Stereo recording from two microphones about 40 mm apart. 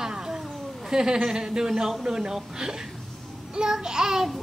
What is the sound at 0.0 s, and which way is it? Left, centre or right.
Cat, centre.